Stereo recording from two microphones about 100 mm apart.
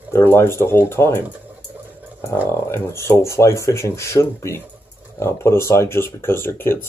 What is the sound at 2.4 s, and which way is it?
Speech, 25° left (ahead or behind).